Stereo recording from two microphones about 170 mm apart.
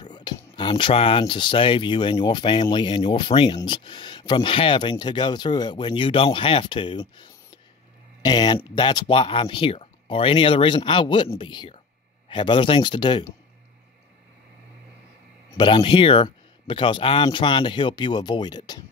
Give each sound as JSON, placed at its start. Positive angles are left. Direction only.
{"t": 0.0, "sound": "speech", "side_deg": 25}
{"t": 15.5, "sound": "speech", "side_deg": 30}